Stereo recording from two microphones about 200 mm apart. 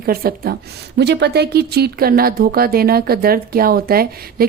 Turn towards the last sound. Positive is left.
turn(degrees=-50)  # may be behind; listen again after turning